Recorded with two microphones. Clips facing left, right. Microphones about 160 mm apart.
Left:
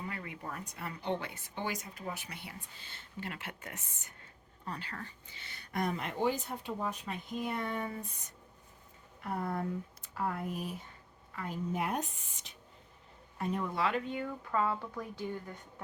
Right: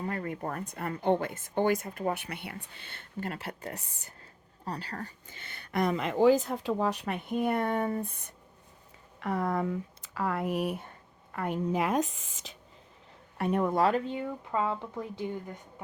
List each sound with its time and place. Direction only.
0.0 s speech: 45° right (ahead or behind)
9.2 s speech: 90° right
13.4 s speech: 55° right (ahead or behind); by 15.3 s 20° right (ahead or behind)